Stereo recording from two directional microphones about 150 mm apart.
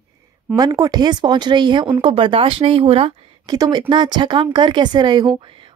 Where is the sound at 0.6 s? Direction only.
25° right (ahead or behind).